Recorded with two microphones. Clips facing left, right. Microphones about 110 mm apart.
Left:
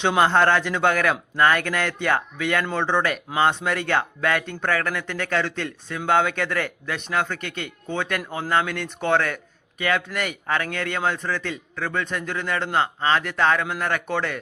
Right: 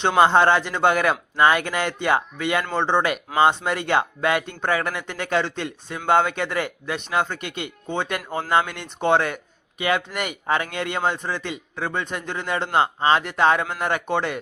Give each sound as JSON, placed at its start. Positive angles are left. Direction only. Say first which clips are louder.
{"t": 0.2, "sound": "speech", "louder": "right 3 dB", "side_deg": -10}